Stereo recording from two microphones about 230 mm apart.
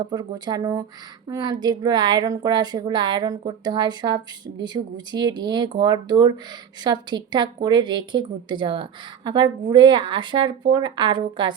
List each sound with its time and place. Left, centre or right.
0.0 s a woman's voice: centre